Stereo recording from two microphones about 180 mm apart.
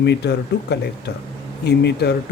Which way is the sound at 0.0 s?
70° left (ahead or behind).